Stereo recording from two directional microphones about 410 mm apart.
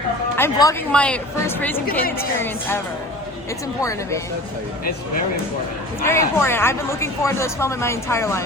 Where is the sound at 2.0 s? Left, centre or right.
Left.